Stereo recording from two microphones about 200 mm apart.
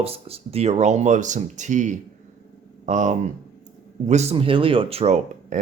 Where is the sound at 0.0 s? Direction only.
30° right (ahead or behind).